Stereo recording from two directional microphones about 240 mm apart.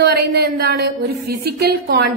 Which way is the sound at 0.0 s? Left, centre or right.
Right.